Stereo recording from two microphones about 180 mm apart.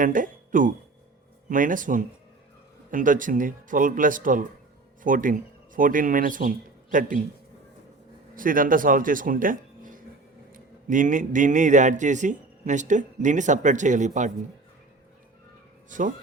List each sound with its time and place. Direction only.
0.0 s speech: 50° right (ahead or behind)
8.4 s speech: 50° right (ahead or behind)
15.9 s speech: 45° right (ahead or behind)